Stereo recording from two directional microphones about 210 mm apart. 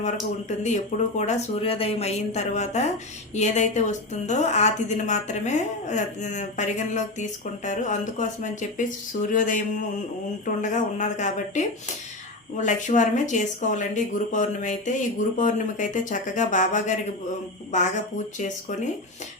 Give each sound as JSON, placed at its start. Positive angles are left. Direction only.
{"t": 0.0, "sound": "a woman's voice", "side_deg": 35}